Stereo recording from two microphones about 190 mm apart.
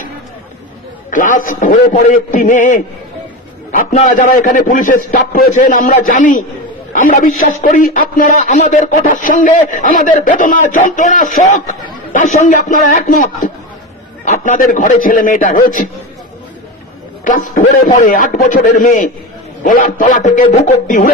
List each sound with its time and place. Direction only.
1.1 s a man's voice: 45° left (ahead or behind)
17.2 s a man's voice: 45° left (ahead or behind)